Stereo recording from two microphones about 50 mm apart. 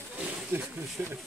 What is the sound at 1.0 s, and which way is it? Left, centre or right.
Speech, right.